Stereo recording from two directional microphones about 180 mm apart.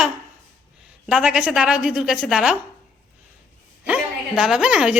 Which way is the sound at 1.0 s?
5° right (ahead or behind).